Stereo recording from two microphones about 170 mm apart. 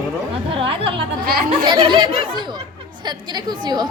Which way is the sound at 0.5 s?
35° right (ahead or behind).